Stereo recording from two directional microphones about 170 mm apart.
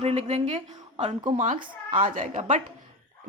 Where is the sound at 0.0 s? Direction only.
35° right (ahead or behind).